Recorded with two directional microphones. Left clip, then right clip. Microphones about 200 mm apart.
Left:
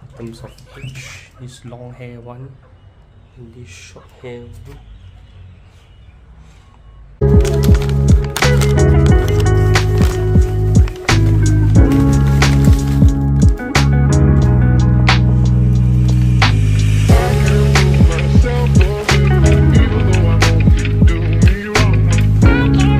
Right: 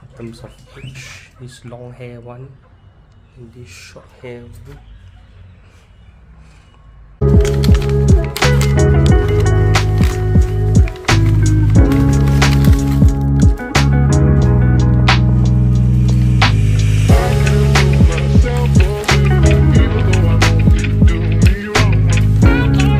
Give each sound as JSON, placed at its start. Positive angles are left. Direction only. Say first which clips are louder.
{"t": 0.3, "sound": "speech", "louder": "left 1 dB", "side_deg": 5}
{"t": 3.6, "sound": "speech", "louder": "right 2 dB", "side_deg": 0}
{"t": 7.2, "sound": "music", "louder": "even", "side_deg": 0}